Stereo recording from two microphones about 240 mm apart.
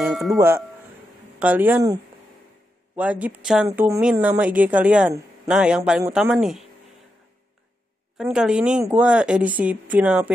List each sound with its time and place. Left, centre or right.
0.0 s speech: centre
3.0 s speech: centre
8.2 s speech: centre